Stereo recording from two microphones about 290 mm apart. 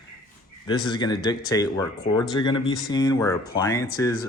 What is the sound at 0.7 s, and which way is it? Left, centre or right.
Speech, centre.